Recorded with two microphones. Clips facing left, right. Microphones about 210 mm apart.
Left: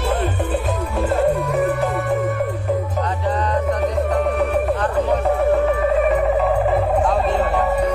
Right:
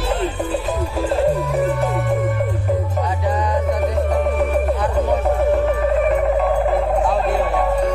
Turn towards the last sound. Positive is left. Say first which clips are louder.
# even
turn(degrees=0)  # may be behind; listen again after turning